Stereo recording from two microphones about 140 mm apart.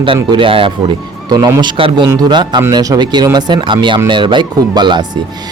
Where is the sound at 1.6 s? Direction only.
35° right (ahead or behind).